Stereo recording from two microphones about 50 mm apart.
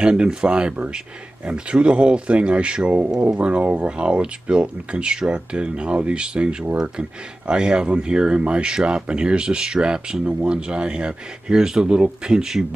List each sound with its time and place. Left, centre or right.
0.0 s speech: centre